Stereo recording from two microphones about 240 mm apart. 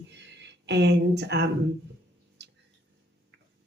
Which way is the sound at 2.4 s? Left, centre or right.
Right.